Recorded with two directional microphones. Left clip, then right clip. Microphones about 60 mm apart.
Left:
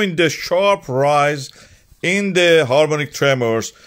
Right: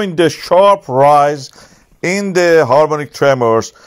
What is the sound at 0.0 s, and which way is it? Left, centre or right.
Speech, right.